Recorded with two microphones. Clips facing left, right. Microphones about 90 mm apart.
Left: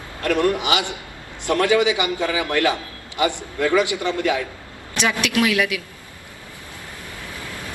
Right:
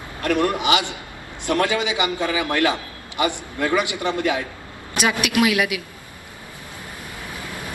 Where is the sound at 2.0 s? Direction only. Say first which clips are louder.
Even; 20° right (ahead or behind).